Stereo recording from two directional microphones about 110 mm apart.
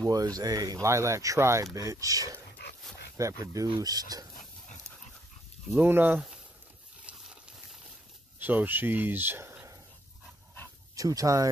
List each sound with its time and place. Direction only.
0.0 s speech: 35° right (ahead or behind)
5.7 s speech: 20° right (ahead or behind)
8.4 s speech: 15° right (ahead or behind)
11.0 s speech: 30° right (ahead or behind)